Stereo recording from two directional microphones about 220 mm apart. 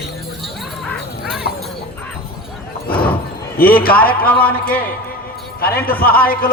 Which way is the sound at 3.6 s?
40° left (ahead or behind).